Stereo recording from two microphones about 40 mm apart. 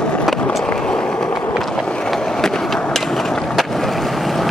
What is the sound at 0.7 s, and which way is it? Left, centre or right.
Vehicle, left.